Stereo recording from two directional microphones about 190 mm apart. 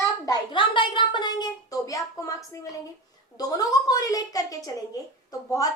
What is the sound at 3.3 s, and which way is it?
A child's voice, 20° left (ahead or behind).